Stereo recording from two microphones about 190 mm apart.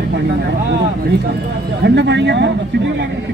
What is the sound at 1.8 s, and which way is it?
Speech, 65° right (ahead or behind).